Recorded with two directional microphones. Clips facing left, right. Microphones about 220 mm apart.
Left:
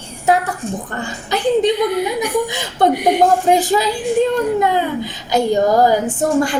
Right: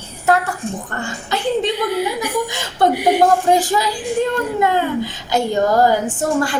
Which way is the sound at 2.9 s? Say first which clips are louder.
Even; 5° right (ahead or behind).